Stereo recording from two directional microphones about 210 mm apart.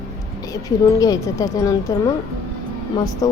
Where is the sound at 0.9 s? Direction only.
15° left (ahead or behind).